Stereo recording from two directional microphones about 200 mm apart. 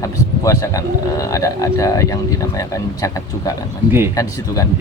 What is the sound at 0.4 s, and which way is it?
Speech, 15° left (ahead or behind).